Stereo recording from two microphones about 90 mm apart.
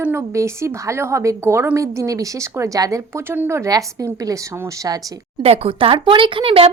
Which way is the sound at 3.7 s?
40° right (ahead or behind).